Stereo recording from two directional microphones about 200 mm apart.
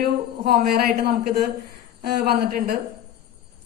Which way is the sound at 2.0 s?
50° right (ahead or behind).